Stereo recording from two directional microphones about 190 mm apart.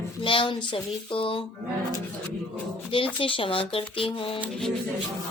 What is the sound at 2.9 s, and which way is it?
Speech, 25° left (ahead or behind).